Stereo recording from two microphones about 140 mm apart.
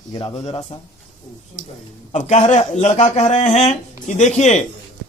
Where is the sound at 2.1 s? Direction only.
55° left (ahead or behind).